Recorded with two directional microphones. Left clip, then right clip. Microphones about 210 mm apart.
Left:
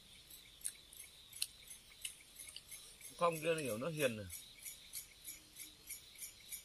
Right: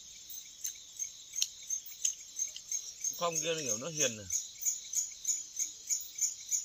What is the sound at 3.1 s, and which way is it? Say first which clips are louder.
Speech: right 1 dB; 5° right (ahead or behind).